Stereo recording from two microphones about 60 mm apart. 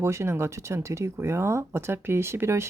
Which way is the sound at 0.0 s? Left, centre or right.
Right.